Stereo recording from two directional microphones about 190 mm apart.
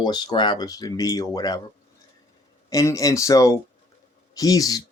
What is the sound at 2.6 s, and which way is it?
Speech, 20° left (ahead or behind).